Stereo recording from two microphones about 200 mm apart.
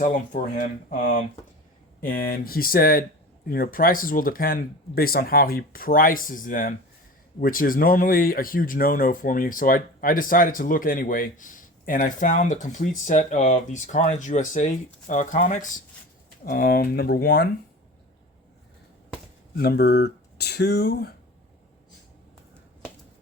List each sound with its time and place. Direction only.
0.0 s speech: 40° left (ahead or behind)
19.5 s speech: 50° left (ahead or behind)